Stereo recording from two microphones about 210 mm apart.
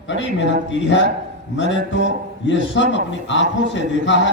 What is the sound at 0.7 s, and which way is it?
A man's voice, 60° left (ahead or behind).